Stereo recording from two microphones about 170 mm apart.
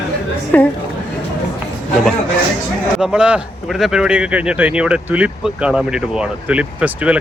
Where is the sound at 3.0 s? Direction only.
5° right (ahead or behind).